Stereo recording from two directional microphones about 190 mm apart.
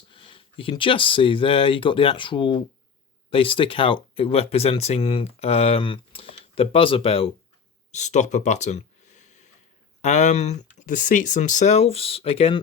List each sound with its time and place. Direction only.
0.1 s speech: 25° left (ahead or behind)
7.9 s a sound: 40° left (ahead or behind)
10.0 s speech: 40° left (ahead or behind)